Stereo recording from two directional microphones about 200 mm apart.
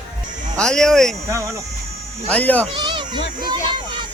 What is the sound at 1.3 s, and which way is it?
Speech, 15° right (ahead or behind).